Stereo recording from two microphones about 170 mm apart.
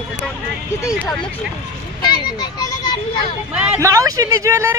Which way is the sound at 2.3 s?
25° left (ahead or behind).